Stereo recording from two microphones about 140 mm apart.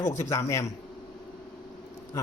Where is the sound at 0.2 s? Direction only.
20° left (ahead or behind).